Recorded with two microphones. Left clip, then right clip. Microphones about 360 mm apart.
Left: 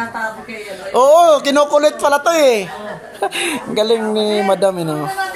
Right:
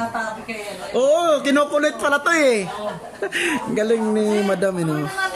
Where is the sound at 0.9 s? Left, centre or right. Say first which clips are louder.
Left 8 dB; centre.